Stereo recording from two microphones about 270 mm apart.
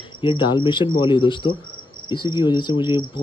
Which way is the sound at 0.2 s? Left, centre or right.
Centre.